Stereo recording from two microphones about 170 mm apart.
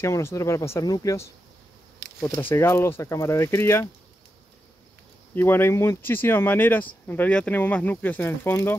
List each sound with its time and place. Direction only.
0.0 s speech: 15° left (ahead or behind)
5.3 s speech: 10° left (ahead or behind)